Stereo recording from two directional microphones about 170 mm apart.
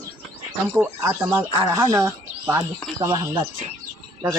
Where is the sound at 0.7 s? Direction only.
15° right (ahead or behind).